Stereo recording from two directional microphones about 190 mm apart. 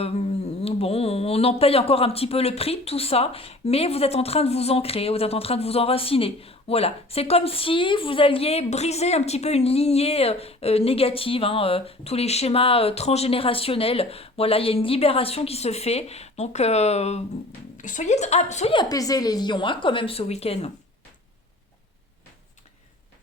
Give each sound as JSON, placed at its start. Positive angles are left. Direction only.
{"t": 0.0, "sound": "speech", "side_deg": 30}
{"t": 18.7, "sound": "a woman's voice", "side_deg": 20}